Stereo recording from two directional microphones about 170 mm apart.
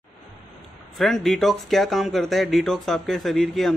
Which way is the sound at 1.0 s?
Centre (ahead or behind).